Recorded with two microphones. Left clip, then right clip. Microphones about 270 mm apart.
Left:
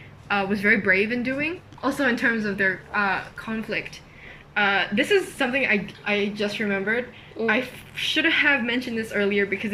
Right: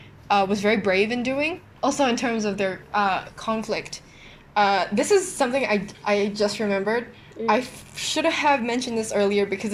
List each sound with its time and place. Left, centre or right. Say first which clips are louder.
0.3 s a woman's voice: right 1 dB; centre